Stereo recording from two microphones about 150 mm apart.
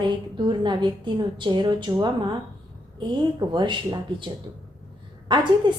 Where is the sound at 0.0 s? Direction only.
30° right (ahead or behind).